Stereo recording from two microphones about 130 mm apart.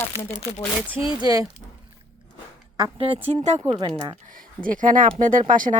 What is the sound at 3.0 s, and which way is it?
Speech, 50° right (ahead or behind).